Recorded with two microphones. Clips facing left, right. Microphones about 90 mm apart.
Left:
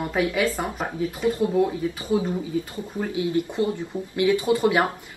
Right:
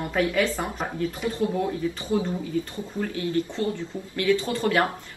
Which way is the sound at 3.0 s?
15° left (ahead or behind).